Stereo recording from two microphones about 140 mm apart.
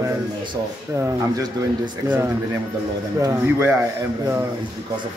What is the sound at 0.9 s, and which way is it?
Speech, 20° right (ahead or behind).